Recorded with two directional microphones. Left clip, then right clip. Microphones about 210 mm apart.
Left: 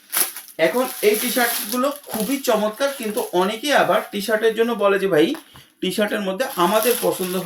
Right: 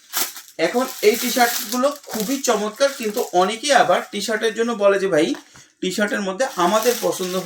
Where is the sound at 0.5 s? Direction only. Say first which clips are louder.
Left 1 dB; centre (ahead or behind).